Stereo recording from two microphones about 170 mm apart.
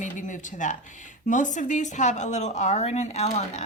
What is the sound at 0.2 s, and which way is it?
A woman's voice, 45° left (ahead or behind).